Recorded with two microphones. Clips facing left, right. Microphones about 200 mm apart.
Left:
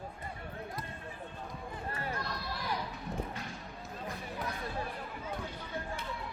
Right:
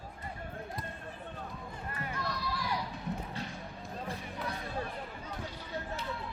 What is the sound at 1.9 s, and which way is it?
Run, 30° left (ahead or behind).